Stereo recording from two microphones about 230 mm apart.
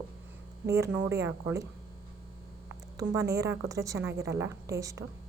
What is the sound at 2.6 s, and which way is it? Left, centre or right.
A woman's voice, centre.